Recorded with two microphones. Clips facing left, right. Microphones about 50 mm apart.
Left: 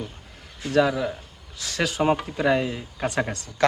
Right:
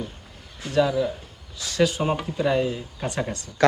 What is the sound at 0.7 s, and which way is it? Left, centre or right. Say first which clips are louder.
Speech: even; left.